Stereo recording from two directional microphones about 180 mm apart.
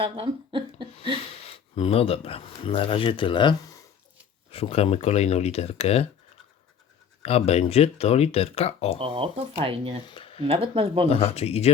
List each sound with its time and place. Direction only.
0.0 s speech: 30° right (ahead or behind)
1.1 s speech: 35° left (ahead or behind)
4.5 s speech: 35° left (ahead or behind)
7.2 s speech: 35° left (ahead or behind)
9.0 s speech: 30° right (ahead or behind)
10.1 s a sound: 30° left (ahead or behind)
10.4 s speech: 30° right (ahead or behind)
11.1 s speech: 35° left (ahead or behind)